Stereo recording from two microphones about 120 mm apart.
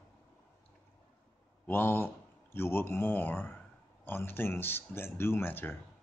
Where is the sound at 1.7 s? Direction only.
20° left (ahead or behind).